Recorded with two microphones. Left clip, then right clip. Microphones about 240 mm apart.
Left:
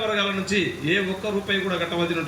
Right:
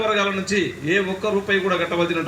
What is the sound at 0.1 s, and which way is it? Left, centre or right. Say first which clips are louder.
A man's voice: right 3 dB; right.